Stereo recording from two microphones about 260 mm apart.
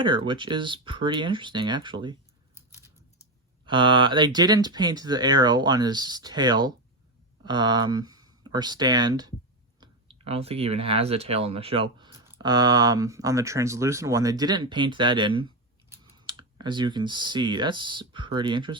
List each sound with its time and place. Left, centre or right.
0.0 s speech: centre
3.7 s speech: centre